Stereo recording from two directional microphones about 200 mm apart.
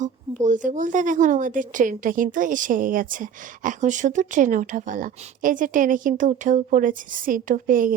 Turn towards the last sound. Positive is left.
turn(degrees=-45)  # may be behind; listen again after turning